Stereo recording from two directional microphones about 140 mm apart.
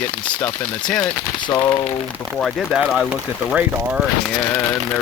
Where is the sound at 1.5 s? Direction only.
30° left (ahead or behind).